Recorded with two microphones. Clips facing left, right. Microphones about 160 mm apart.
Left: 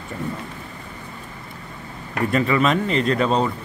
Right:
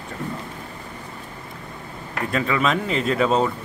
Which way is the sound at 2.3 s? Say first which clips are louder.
Left 3 dB; centre (ahead or behind).